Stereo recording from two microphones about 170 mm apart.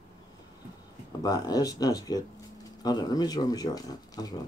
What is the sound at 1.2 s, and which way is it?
Speech, 25° left (ahead or behind).